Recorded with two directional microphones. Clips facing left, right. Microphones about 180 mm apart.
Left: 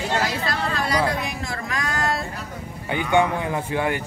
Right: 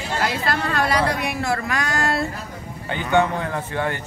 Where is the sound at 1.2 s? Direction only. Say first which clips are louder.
Right 5 dB; 70° right (ahead or behind).